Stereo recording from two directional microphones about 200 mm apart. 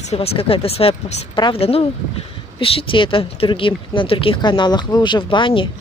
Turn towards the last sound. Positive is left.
turn(degrees=25)  # may be behind; listen again after turning